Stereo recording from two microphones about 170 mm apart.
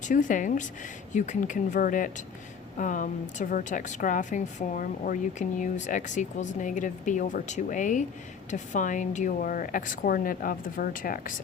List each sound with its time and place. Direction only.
0.0 s a woman's voice: 50° left (ahead or behind)